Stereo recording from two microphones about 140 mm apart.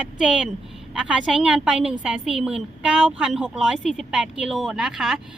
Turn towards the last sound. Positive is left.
turn(degrees=-5)  # may be behind; listen again after turning